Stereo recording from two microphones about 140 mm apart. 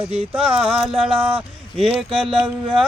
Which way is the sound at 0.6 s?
5° right (ahead or behind).